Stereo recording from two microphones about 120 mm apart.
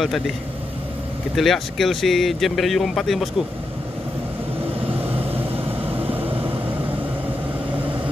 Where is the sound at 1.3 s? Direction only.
Centre (ahead or behind).